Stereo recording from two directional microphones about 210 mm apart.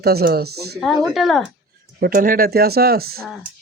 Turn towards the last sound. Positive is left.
turn(degrees=-45)  # may be behind; listen again after turning